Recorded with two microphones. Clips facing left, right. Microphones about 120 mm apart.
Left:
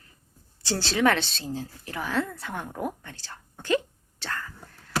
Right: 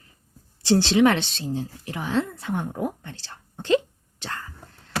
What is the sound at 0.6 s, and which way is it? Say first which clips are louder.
Speech: right 6 dB; 20° right (ahead or behind).